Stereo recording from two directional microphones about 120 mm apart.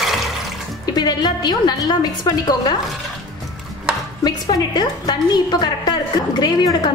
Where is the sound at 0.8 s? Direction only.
35° left (ahead or behind).